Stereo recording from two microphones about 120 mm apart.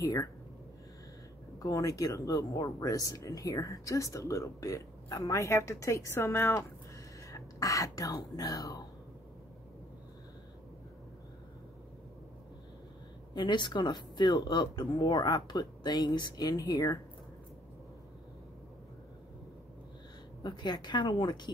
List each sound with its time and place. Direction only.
0.0 s speech: 30° left (ahead or behind)
1.6 s speech: 30° left (ahead or behind)
7.2 s speech: 30° left (ahead or behind)
13.3 s speech: 40° left (ahead or behind)
20.4 s speech: 35° left (ahead or behind)